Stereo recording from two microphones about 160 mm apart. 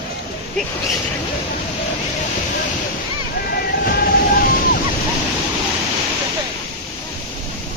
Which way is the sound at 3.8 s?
70° left (ahead or behind).